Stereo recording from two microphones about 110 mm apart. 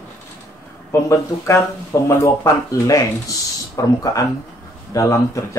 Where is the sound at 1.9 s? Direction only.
30° left (ahead or behind).